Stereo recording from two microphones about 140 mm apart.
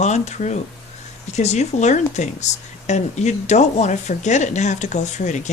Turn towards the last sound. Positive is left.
turn(degrees=60)  # may be behind; listen again after turning